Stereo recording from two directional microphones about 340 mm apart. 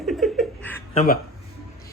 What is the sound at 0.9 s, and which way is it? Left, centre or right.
Speech, left.